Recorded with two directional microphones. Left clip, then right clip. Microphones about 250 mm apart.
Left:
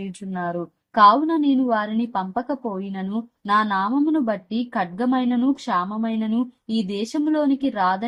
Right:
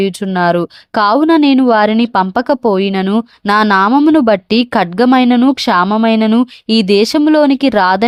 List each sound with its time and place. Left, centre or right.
0.2 s a woman's voice: right